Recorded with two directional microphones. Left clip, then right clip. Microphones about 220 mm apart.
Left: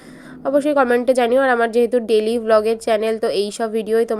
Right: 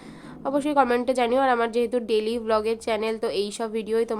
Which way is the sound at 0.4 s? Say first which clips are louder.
Left 6 dB; 15° left (ahead or behind).